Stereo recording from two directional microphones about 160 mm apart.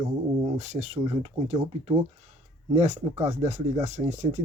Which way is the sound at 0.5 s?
45° right (ahead or behind).